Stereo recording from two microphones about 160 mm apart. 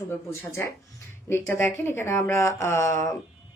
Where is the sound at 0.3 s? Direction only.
15° left (ahead or behind).